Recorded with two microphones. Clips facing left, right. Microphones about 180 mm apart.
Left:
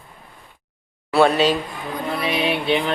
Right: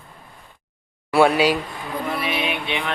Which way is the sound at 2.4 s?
35° left (ahead or behind).